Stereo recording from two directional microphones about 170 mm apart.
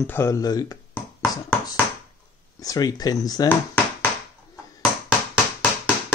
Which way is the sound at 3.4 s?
10° left (ahead or behind).